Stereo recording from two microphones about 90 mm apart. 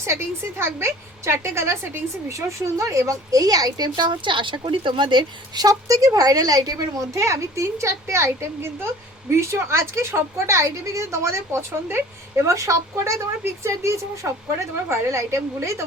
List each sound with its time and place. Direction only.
0.6 s a woman's voice: 30° right (ahead or behind); by 5.6 s 60° right (ahead or behind)
5.6 s a woman's voice: 40° right (ahead or behind)